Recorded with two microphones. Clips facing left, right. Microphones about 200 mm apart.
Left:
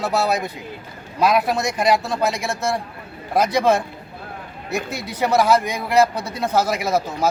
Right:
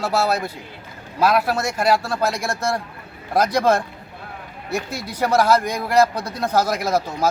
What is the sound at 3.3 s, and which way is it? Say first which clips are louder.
Speech: even; 10° left (ahead or behind).